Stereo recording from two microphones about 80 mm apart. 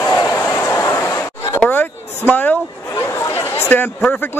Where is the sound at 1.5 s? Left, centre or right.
Centre.